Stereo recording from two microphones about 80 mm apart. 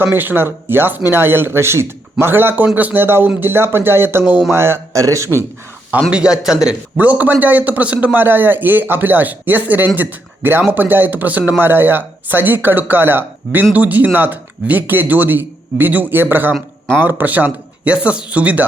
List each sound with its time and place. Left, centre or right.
0.0 s a man's voice: right
6.1 s a man's voice: centre
6.9 s a man's voice: centre